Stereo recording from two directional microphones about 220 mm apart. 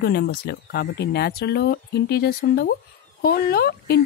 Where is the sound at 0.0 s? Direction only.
50° left (ahead or behind).